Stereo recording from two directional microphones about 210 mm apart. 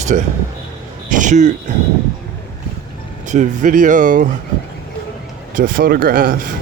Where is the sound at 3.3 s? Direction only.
35° right (ahead or behind).